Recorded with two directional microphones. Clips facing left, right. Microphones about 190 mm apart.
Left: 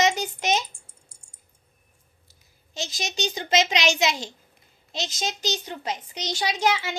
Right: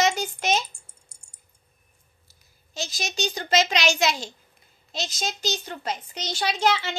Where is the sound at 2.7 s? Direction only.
20° left (ahead or behind).